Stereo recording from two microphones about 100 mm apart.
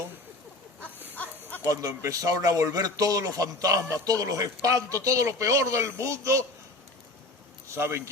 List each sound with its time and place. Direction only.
0.8 s goat: 15° left (ahead or behind)
1.7 s speech: 35° right (ahead or behind)
7.7 s speech: 25° right (ahead or behind)